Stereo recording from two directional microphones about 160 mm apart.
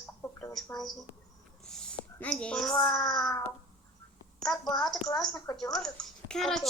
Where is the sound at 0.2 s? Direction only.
15° left (ahead or behind).